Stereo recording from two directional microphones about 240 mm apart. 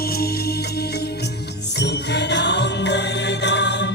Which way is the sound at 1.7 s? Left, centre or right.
Left.